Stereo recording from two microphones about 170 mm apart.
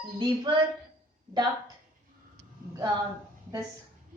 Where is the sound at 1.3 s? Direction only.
25° right (ahead or behind).